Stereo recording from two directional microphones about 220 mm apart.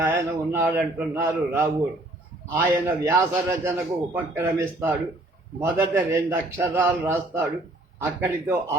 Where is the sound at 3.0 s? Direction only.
10° right (ahead or behind).